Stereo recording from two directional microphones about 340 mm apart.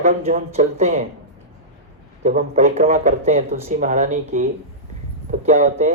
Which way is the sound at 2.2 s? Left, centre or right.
Right.